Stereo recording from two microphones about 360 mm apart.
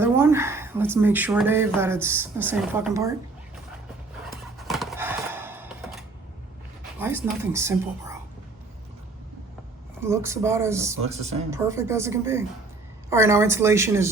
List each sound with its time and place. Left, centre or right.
0.0 s speech: centre
4.3 s horse: centre
7.0 s speech: centre
10.0 s speech: centre